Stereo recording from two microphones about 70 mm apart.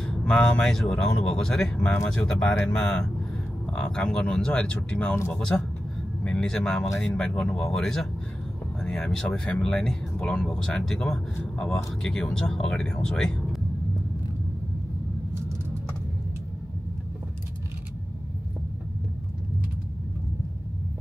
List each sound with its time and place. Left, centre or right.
0.0 s speech: centre
5.5 s speech: left
6.2 s speech: centre